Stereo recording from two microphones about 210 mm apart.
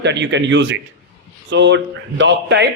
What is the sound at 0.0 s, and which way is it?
A man's voice, 55° right (ahead or behind).